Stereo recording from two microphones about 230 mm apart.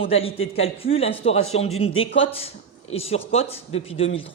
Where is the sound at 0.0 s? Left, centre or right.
Left.